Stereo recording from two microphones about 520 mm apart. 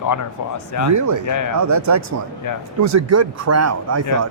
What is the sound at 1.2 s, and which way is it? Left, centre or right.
Speech, left.